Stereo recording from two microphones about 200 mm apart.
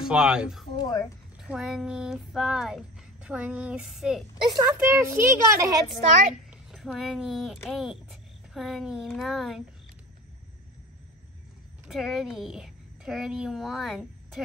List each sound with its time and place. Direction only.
0.0 s speech: 5° right (ahead or behind)
0.7 s a woman's voice: 20° left (ahead or behind)
1.5 s speech: centre (ahead or behind)
4.5 s a child's voice: 20° right (ahead or behind)
6.7 s a child's voice: centre (ahead or behind)
11.9 s a woman's voice: centre (ahead or behind)